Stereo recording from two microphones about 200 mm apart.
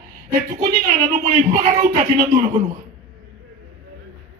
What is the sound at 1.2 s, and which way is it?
Speech, 40° right (ahead or behind).